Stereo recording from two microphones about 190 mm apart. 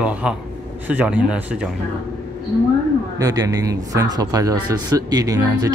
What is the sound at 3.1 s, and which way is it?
Speech, 20° right (ahead or behind).